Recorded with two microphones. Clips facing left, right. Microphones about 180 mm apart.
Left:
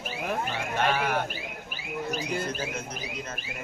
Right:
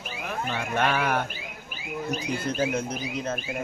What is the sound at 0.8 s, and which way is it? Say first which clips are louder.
Speech: right 1 dB; 55° right (ahead or behind).